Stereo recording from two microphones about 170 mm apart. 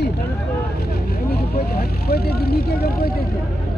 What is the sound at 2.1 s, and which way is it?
Speech, 65° left (ahead or behind).